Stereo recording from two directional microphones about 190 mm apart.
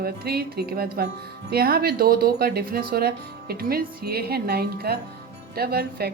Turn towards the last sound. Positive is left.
turn(degrees=-55)  # may be behind; listen again after turning